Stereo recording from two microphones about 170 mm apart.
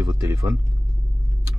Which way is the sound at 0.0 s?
15° right (ahead or behind).